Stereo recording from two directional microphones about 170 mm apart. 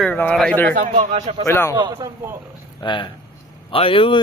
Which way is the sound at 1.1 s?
35° right (ahead or behind).